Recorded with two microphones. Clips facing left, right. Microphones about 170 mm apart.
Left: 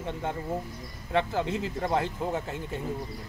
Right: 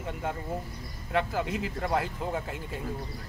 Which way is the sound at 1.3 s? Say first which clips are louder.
Left 2 dB; 10° right (ahead or behind).